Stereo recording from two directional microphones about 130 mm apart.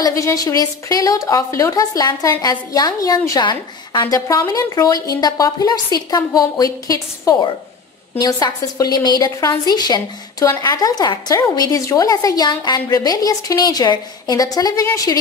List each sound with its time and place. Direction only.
0.0 s a woman's voice: 25° left (ahead or behind)